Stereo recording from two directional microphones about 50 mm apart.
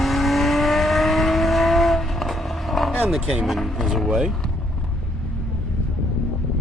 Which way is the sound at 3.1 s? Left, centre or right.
Centre.